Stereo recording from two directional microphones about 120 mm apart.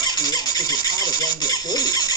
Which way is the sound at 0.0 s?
35° left (ahead or behind).